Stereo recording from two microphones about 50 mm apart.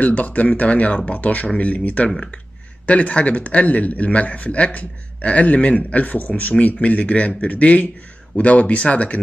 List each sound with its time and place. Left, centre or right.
0.0 s a man's voice: left